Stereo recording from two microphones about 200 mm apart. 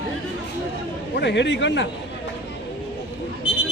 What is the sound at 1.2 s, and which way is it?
Speech, 60° left (ahead or behind).